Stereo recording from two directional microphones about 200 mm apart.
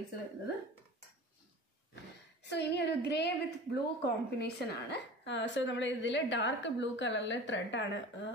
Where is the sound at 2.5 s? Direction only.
55° left (ahead or behind).